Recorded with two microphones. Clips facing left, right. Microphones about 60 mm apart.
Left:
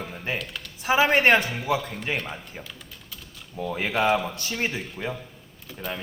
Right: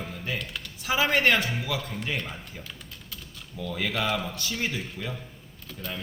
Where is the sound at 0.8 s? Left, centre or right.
Left.